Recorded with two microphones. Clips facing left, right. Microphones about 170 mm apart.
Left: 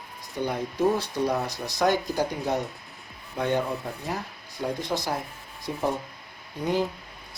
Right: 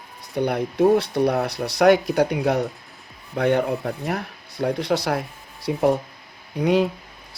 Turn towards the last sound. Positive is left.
turn(degrees=-70)  # may be behind; listen again after turning